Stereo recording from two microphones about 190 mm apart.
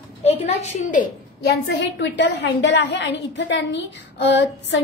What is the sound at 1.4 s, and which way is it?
A woman's voice, 65° left (ahead or behind).